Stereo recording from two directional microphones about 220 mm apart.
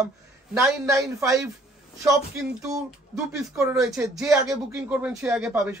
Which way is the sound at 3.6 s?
15° right (ahead or behind).